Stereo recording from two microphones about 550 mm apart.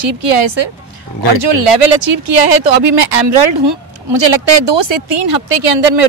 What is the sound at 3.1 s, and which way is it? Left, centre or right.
Speech, right.